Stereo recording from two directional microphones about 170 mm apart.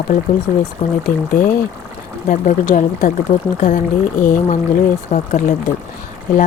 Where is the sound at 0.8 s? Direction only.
35° left (ahead or behind).